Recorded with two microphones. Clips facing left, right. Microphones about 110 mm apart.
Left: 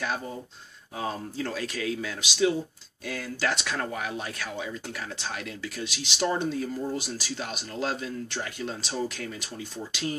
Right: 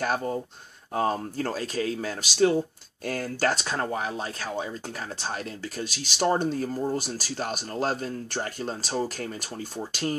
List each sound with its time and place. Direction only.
0.0 s speech: 50° right (ahead or behind)